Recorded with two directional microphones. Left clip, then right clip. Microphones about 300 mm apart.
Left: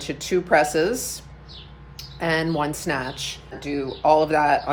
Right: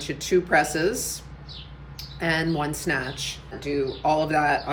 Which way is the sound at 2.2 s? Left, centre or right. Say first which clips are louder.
Left 2 dB; centre.